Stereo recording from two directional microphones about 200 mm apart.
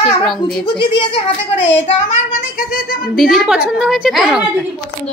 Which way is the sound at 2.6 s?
45° left (ahead or behind).